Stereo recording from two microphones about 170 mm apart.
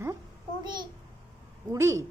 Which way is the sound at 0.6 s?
25° right (ahead or behind).